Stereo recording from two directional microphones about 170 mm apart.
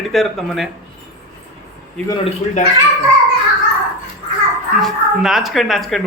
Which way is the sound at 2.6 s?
50° left (ahead or behind).